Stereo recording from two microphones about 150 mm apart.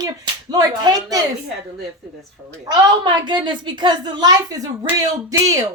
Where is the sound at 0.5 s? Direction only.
25° right (ahead or behind).